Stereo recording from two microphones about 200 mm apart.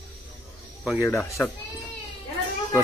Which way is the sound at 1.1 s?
15° left (ahead or behind).